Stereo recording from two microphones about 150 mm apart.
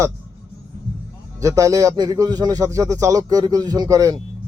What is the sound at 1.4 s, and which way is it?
Speech, 20° right (ahead or behind).